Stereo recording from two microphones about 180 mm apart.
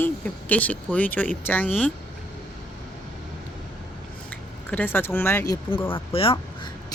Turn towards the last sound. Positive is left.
turn(degrees=30)  # may be behind; listen again after turning